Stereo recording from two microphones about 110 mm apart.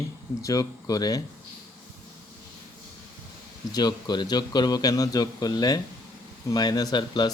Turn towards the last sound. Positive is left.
turn(degrees=40)  # may be behind; listen again after turning